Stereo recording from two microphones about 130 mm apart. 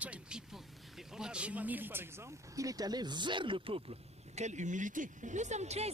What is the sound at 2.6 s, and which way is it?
Speech, 30° right (ahead or behind).